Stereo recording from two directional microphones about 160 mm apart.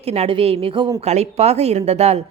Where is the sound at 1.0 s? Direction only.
45° right (ahead or behind).